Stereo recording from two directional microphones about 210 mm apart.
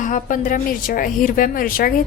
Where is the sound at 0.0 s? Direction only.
40° left (ahead or behind).